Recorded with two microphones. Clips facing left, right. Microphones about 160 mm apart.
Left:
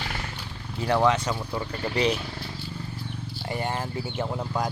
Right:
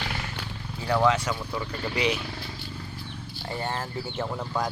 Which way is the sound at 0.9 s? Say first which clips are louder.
Left 1 dB; 20° left (ahead or behind).